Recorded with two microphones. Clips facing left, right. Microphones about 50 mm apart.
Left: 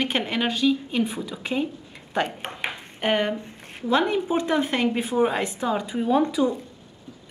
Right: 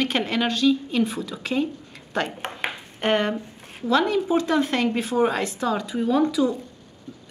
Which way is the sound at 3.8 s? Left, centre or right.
Left.